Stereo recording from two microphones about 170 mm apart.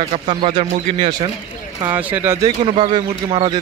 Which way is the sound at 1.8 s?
10° right (ahead or behind).